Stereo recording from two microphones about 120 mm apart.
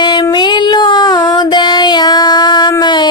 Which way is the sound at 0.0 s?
35° left (ahead or behind).